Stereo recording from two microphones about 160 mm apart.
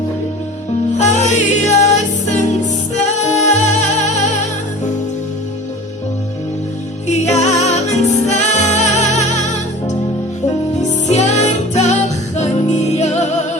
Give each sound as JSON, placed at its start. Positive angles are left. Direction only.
{"t": 0.9, "sound": "music", "side_deg": 45}
{"t": 7.1, "sound": "music", "side_deg": 45}
{"t": 10.8, "sound": "music", "side_deg": 45}